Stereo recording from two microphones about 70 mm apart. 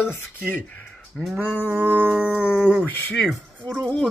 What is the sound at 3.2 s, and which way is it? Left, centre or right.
Speech, centre.